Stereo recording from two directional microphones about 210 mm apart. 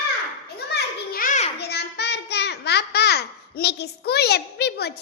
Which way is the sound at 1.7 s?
50° left (ahead or behind).